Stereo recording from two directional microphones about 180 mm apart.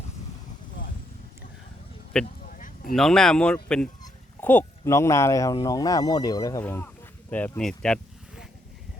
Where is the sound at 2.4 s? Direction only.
45° left (ahead or behind).